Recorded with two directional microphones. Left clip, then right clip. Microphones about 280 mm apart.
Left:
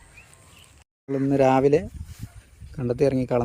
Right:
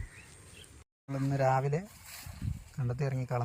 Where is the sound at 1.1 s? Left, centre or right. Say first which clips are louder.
Left 10 dB; left.